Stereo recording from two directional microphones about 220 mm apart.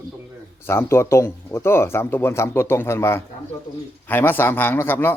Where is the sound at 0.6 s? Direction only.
10° left (ahead or behind).